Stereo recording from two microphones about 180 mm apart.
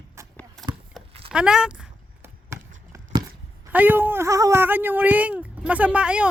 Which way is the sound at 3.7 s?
10° right (ahead or behind).